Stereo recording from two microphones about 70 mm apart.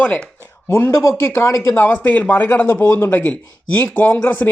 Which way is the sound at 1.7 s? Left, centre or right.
Left.